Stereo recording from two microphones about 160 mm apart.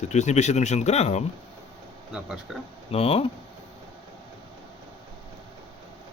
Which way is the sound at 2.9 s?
40° left (ahead or behind).